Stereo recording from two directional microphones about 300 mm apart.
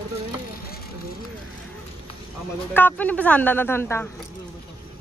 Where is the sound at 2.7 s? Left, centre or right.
Centre.